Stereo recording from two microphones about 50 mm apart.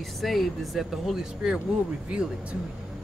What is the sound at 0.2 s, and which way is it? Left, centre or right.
Speech, centre.